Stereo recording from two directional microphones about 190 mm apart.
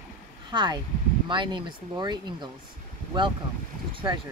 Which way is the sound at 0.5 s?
25° right (ahead or behind).